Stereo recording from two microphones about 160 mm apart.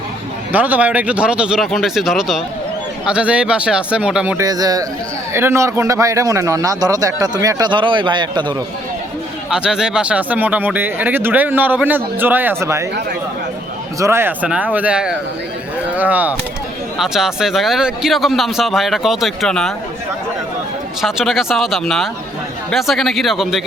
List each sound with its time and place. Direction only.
0.5 s a man's voice: 10° right (ahead or behind)
4.4 s a man's voice: 25° right (ahead or behind)
9.5 s speech: 5° right (ahead or behind)
14.0 s a man's voice: 15° right (ahead or behind); by 19.7 s 5° left (ahead or behind)
21.0 s a man's voice: centre (ahead or behind)